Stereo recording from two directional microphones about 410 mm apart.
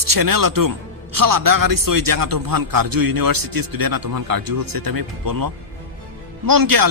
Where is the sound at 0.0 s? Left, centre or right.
Right.